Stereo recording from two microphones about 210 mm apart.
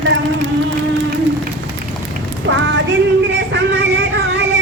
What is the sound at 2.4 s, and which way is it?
Speech, 60° right (ahead or behind).